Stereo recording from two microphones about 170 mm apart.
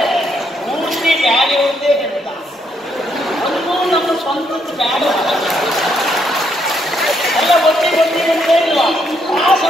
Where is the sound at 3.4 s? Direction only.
Centre (ahead or behind).